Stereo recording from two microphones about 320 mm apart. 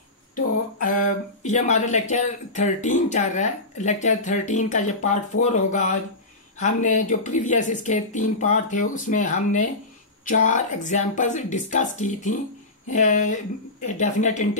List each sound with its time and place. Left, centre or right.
0.7 s speech: left